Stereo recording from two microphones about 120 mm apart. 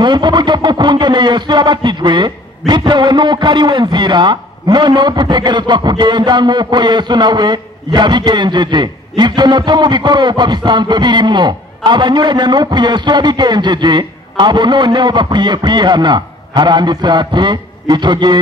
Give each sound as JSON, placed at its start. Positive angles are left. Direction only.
{"t": 0.0, "sound": "a man's voice", "side_deg": -40}